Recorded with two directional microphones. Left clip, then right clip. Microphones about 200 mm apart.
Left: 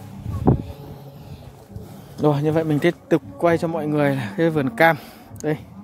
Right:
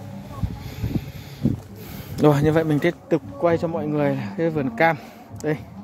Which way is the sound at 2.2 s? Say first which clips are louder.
Right 2 dB; 5° right (ahead or behind).